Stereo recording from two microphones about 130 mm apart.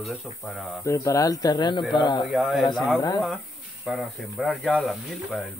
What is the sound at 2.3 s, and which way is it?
Speech, centre (ahead or behind).